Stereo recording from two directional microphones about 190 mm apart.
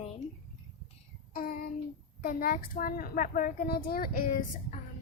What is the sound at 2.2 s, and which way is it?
A child's voice, 50° left (ahead or behind).